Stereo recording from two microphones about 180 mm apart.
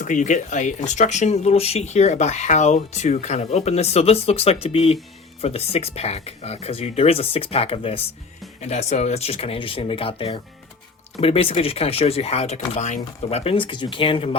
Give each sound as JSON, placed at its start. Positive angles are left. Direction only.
{"t": 0.0, "sound": "speech", "side_deg": 45}